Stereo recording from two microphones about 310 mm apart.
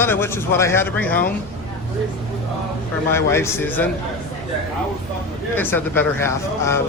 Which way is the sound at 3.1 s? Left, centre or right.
Centre.